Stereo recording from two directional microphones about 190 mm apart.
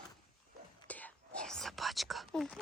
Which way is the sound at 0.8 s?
10° left (ahead or behind).